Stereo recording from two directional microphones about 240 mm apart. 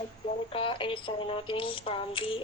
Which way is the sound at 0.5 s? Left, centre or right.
Left.